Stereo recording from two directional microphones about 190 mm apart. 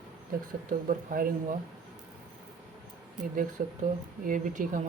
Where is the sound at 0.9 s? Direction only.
45° right (ahead or behind).